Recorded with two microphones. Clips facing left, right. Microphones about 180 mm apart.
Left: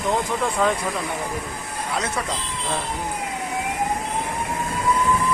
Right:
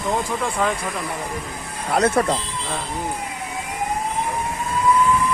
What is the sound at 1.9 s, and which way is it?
Speech, 55° right (ahead or behind).